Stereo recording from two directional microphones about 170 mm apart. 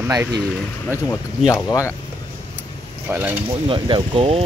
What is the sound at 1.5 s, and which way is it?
Speech, 20° left (ahead or behind).